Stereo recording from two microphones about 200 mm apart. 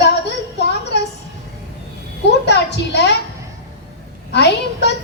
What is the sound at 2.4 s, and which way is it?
Speech, 55° left (ahead or behind).